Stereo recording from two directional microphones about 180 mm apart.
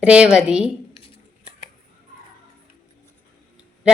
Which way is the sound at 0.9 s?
30° left (ahead or behind).